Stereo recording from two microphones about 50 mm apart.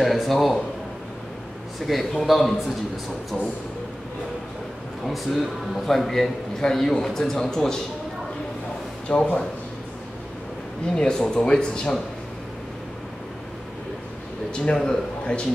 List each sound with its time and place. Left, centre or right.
0.0 s a man's voice: centre
1.9 s a man's voice: centre
5.0 s a man's voice: centre
9.1 s speech: left
11.0 s speech: centre
14.5 s speech: centre